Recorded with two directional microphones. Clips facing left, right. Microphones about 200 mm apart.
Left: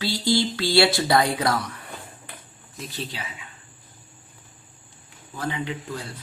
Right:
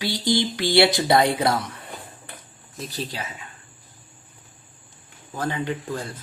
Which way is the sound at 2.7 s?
40° right (ahead or behind).